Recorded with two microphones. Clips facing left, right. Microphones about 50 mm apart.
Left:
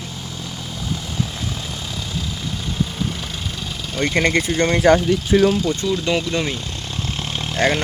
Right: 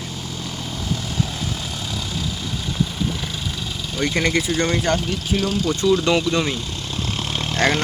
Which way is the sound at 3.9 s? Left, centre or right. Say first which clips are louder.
Left 2 dB; left.